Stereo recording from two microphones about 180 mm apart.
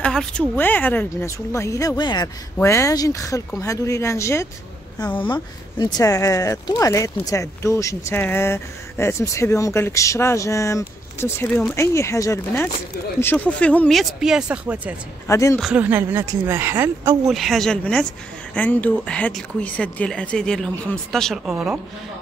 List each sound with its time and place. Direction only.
0.0 s speech: 5° left (ahead or behind)
15.2 s speech: 15° left (ahead or behind)
15.6 s speech: 10° right (ahead or behind)
17.3 s speech: centre (ahead or behind)